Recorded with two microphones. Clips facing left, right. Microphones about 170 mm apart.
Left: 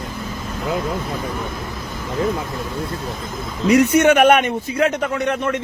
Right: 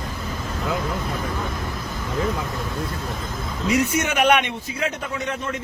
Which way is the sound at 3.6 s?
65° left (ahead or behind).